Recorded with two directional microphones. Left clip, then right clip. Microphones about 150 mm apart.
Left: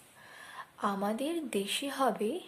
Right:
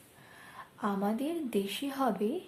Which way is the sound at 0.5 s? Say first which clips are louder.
Left 1 dB; 25° left (ahead or behind).